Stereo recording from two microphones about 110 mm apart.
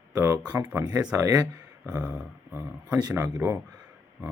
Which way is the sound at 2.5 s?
25° right (ahead or behind).